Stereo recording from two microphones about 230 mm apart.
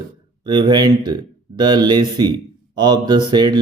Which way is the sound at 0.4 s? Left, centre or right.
Centre.